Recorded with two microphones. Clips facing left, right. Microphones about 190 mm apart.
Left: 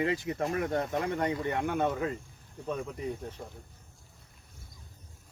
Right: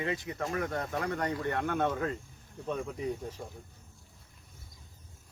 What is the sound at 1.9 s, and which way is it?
Speech, centre (ahead or behind).